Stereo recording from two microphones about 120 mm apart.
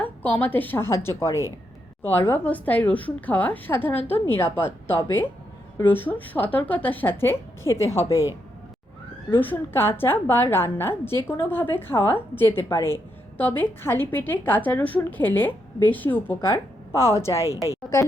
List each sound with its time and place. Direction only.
0.0 s a woman's voice: 15° left (ahead or behind)
9.4 s a woman's voice: 15° left (ahead or behind)